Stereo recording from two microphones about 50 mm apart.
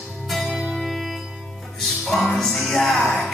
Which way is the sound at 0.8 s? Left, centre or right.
Centre.